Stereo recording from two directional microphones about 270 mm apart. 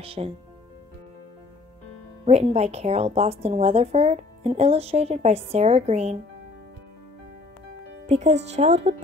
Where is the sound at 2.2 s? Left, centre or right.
Right.